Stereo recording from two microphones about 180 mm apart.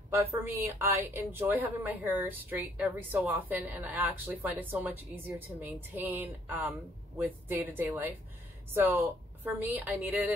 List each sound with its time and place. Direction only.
0.1 s a woman's voice: 15° right (ahead or behind)